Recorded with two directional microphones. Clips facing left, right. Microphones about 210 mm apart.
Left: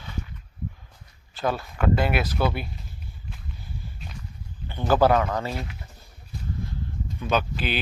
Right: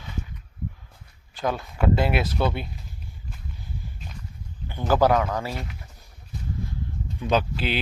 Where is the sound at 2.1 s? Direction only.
25° right (ahead or behind).